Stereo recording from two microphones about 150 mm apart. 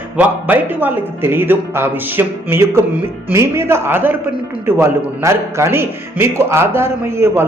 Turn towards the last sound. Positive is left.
turn(degrees=-15)  # may be behind; listen again after turning